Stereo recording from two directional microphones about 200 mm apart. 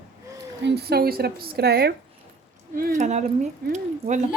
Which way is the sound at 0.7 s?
55° right (ahead or behind).